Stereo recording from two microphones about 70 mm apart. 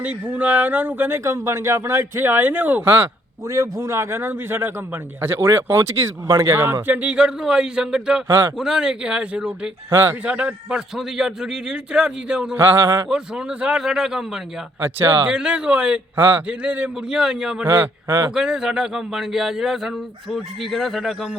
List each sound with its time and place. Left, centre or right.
0.0 s a man's voice: right
6.8 s a man's voice: right
12.5 s speech: right
13.1 s a man's voice: centre
14.8 s speech: right
15.3 s a man's voice: centre
16.1 s speech: right
16.5 s a man's voice: centre